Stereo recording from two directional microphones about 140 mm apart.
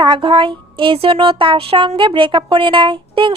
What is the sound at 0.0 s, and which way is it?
Speech, 35° right (ahead or behind).